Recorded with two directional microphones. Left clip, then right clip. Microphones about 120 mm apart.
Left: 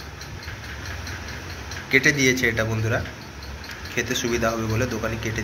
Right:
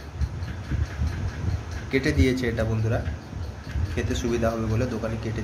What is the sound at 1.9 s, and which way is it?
A man's voice, 15° right (ahead or behind).